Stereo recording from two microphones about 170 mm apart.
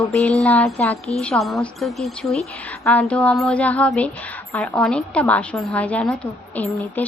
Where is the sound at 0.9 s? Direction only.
40° left (ahead or behind).